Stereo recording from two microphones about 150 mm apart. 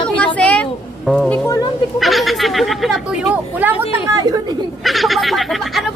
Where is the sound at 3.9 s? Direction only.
20° right (ahead or behind).